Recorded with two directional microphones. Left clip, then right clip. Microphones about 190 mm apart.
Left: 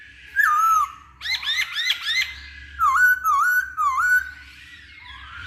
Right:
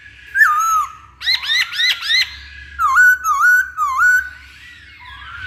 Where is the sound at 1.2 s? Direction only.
20° right (ahead or behind).